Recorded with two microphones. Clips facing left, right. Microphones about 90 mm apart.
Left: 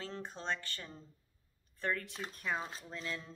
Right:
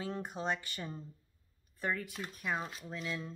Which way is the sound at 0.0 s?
15° right (ahead or behind).